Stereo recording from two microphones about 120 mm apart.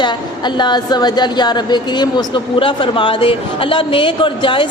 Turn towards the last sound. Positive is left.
turn(degrees=45)  # may be behind; listen again after turning